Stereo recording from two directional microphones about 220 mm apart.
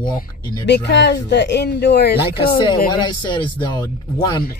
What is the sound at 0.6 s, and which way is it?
Speech, 50° left (ahead or behind).